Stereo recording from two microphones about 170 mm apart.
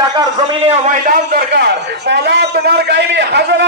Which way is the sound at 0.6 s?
50° right (ahead or behind).